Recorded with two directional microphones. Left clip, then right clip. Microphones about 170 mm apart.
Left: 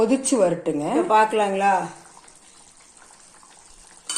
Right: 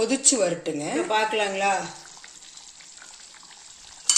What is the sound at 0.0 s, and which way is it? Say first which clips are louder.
Speech: left 3 dB; centre (ahead or behind).